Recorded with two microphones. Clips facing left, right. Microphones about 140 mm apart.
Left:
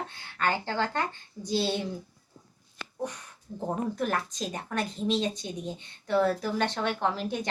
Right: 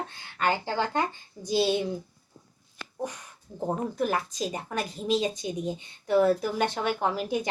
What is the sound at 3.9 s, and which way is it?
Speech, 5° right (ahead or behind).